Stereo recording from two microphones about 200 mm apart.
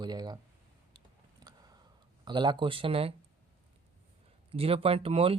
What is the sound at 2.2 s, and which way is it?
Speech, 20° right (ahead or behind).